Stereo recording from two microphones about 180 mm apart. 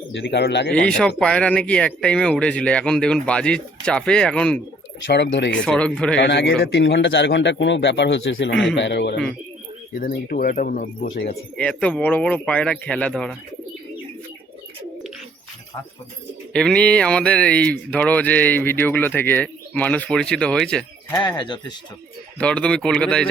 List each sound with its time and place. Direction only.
0.3 s a man's voice: 70° left (ahead or behind)
0.7 s speech: 5° left (ahead or behind)
5.0 s a man's voice: 80° left
5.6 s speech: 5° left (ahead or behind)
6.1 s a man's voice: 75° left (ahead or behind)
10.1 s speech: 55° left (ahead or behind)
11.5 s speech: 5° left (ahead or behind)
16.5 s speech: 5° left (ahead or behind)
21.1 s speech: 25° left (ahead or behind)
22.4 s speech: 5° left (ahead or behind)